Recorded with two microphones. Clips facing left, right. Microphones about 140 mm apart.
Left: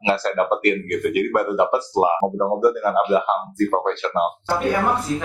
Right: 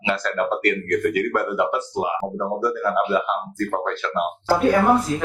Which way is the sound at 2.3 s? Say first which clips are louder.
Left 5 dB; 25° left (ahead or behind).